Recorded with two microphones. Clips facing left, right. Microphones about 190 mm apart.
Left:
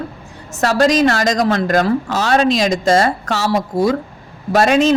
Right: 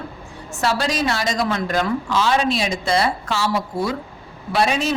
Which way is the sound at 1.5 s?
75° left (ahead or behind).